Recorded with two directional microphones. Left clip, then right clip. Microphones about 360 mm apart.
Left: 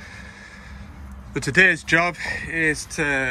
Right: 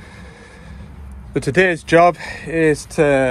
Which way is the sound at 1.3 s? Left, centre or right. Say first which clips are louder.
Right 1 dB; centre.